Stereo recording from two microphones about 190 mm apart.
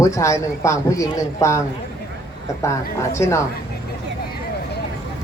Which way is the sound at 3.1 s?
15° left (ahead or behind).